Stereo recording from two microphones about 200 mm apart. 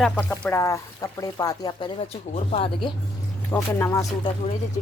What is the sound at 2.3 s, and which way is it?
Speech, 30° left (ahead or behind).